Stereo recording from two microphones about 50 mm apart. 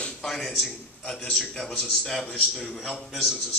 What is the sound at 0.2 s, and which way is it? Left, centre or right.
Speech, centre.